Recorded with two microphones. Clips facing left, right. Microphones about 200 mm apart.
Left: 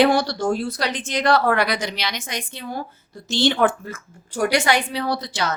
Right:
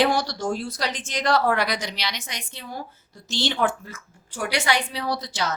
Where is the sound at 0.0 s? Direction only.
60° left (ahead or behind).